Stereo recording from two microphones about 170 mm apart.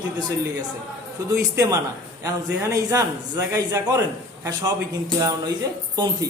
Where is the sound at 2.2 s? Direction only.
20° right (ahead or behind).